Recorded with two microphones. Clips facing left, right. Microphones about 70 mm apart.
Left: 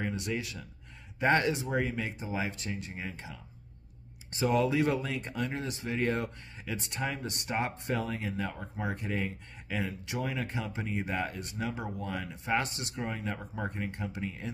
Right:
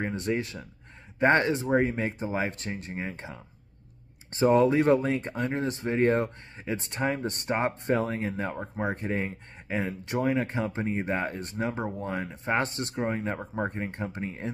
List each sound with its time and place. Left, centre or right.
0.0 s speech: right